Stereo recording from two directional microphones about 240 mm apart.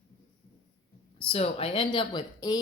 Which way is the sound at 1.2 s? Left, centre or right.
Left.